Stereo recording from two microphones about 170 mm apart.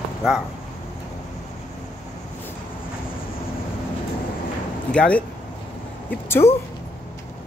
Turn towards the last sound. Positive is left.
turn(degrees=15)  # may be behind; listen again after turning